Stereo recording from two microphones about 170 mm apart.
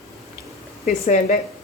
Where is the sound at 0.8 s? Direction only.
45° left (ahead or behind).